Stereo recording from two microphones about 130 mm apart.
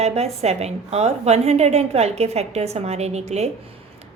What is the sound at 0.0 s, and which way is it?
A woman's voice, 55° right (ahead or behind).